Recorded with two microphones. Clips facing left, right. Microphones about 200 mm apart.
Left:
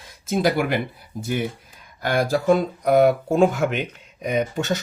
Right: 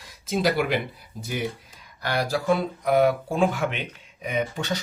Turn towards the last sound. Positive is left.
turn(degrees=45)  # may be behind; listen again after turning